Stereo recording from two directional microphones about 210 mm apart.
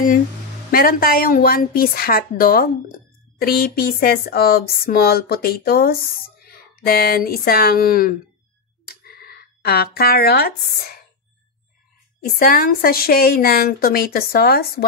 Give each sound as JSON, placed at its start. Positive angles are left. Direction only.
{"t": 0.7, "sound": "speech", "side_deg": 45}
{"t": 12.2, "sound": "speech", "side_deg": 45}